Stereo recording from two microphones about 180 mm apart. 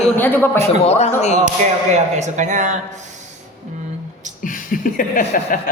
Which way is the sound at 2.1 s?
40° right (ahead or behind).